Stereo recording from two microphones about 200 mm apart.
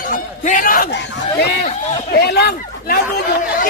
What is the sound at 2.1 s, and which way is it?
Speech, 55° left (ahead or behind).